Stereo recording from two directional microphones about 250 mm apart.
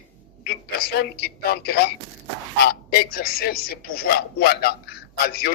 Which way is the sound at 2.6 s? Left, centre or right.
Left.